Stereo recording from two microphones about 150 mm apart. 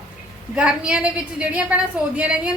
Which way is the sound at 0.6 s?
5° right (ahead or behind).